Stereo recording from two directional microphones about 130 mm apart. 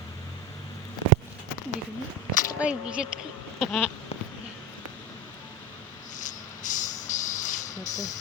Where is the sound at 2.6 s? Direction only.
10° right (ahead or behind).